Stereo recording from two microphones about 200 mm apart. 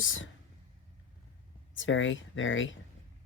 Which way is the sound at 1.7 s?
70° left (ahead or behind).